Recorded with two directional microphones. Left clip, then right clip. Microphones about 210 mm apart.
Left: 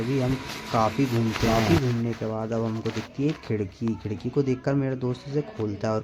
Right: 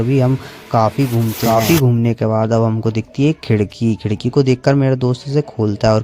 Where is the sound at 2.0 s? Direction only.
45° right (ahead or behind).